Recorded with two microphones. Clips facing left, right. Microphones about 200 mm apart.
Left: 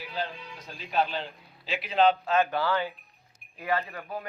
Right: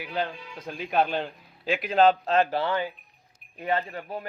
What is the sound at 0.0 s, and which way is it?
A man's voice, 60° right (ahead or behind).